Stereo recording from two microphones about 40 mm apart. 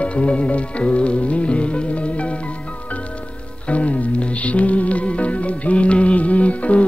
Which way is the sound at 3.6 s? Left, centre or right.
Left.